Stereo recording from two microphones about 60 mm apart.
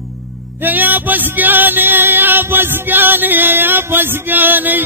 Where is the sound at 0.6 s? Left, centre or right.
Right.